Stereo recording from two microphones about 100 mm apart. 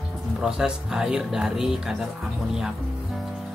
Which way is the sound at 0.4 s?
5° right (ahead or behind).